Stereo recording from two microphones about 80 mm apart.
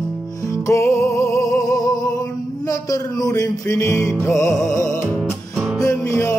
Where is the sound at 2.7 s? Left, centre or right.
Left.